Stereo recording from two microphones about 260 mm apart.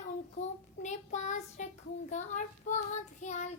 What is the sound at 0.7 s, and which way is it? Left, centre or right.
Speech, left.